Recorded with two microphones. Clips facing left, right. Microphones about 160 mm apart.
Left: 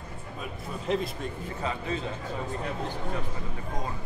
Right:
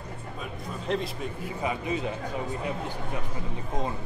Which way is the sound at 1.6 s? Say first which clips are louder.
Right 2 dB; 15° right (ahead or behind).